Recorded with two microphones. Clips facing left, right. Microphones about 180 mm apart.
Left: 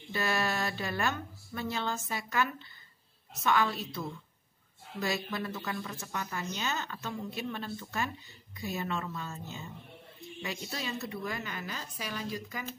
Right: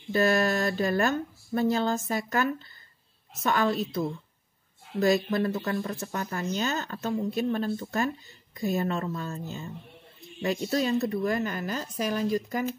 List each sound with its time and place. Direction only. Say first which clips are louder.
0.1 s speech: right 8 dB; 45° right (ahead or behind)
5.0 s speech: right 10 dB; 45° right (ahead or behind)